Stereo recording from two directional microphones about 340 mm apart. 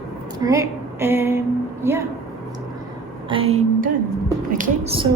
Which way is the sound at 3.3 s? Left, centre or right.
Centre.